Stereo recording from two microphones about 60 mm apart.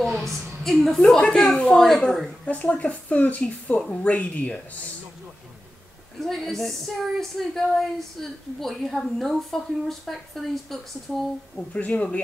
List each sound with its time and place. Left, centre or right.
0.0 s a sound: centre
1.3 s a woman's voice: centre
2.4 s a woman's voice: left
6.1 s a woman's voice: centre
11.5 s a woman's voice: left